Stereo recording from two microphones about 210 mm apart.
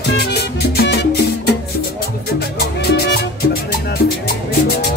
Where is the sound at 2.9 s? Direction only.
50° left (ahead or behind).